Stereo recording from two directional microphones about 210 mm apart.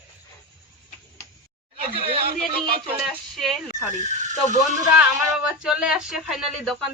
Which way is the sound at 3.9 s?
35° right (ahead or behind).